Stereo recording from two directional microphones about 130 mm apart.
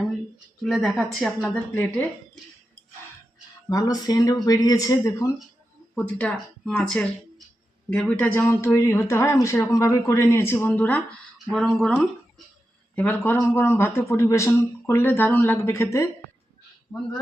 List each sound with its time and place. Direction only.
0.6 s a woman's voice: centre (ahead or behind)
1.7 s speech: 15° left (ahead or behind)
3.7 s speech: 30° left (ahead or behind)
5.9 s a woman's voice: 5° left (ahead or behind)
13.0 s speech: 15° left (ahead or behind)